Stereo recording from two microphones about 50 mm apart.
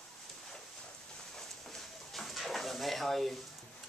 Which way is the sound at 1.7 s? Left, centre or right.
Centre.